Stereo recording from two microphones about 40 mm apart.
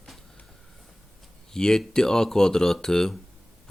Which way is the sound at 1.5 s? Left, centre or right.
Centre.